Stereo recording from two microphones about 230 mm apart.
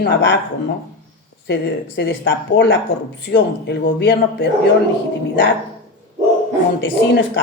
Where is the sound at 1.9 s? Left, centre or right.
Left.